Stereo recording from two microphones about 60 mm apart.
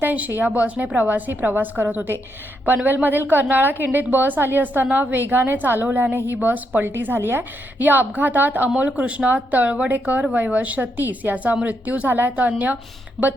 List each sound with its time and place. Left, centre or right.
0.0 s a woman's voice: right